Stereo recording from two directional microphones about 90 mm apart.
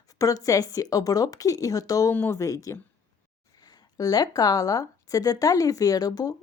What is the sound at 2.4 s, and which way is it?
Speech, 35° left (ahead or behind).